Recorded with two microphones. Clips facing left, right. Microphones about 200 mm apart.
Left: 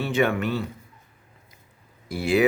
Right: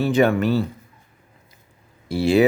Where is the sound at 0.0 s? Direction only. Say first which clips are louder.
Right 5 dB; 40° right (ahead or behind).